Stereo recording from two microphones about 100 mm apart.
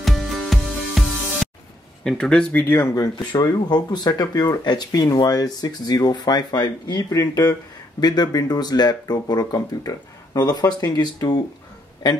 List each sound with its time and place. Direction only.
0.0 s music: centre (ahead or behind)
2.0 s speech: 10° left (ahead or behind)
2.6 s speech: 25° left (ahead or behind)
2.9 s speech: 40° left (ahead or behind)